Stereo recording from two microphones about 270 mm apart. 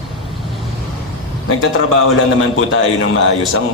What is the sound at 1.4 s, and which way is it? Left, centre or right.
A man's voice, left.